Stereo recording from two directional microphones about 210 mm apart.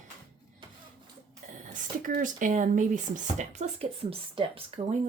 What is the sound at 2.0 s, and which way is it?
Speech, 40° right (ahead or behind).